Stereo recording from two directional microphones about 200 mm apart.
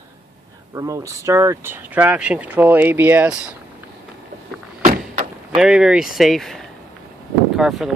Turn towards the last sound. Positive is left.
turn(degrees=0)  # may be behind; listen again after turning